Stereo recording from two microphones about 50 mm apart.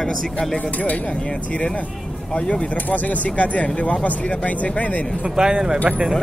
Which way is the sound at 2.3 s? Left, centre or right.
Left.